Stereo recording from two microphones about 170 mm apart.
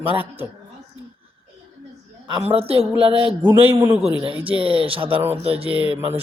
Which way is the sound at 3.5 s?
15° right (ahead or behind).